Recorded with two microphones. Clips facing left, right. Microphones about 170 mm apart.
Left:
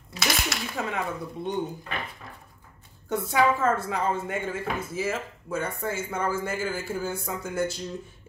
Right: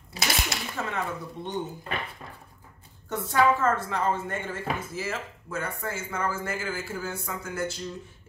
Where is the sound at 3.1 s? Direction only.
10° left (ahead or behind).